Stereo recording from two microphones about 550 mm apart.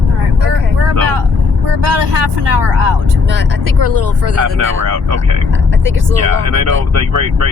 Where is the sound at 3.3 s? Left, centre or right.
Right.